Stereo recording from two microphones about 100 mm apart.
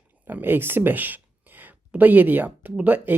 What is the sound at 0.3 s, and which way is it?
Speech, 20° right (ahead or behind).